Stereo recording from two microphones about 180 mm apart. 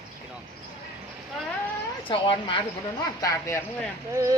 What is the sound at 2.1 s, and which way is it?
Speech, 30° left (ahead or behind).